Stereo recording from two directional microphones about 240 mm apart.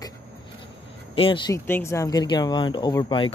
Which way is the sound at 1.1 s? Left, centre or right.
Left.